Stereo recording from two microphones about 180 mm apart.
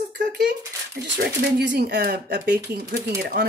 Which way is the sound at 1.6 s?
70° right (ahead or behind).